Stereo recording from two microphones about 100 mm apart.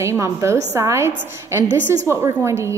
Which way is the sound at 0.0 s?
30° right (ahead or behind).